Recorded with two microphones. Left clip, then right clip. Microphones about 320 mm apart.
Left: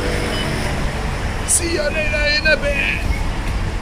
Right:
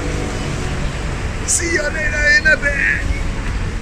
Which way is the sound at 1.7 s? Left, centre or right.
Centre.